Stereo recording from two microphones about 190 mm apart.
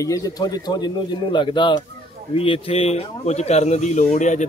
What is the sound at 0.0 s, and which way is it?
Speech, 15° left (ahead or behind).